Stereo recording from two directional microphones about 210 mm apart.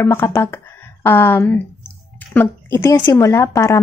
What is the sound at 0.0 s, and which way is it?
A woman's voice, 10° left (ahead or behind).